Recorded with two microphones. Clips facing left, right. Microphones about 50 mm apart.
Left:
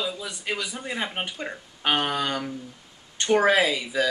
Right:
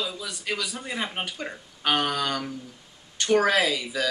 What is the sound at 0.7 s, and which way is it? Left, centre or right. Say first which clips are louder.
Speech: left 1 dB; centre.